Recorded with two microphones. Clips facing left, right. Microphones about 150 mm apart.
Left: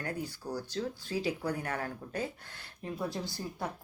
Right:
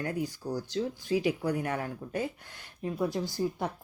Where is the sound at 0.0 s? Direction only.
20° right (ahead or behind).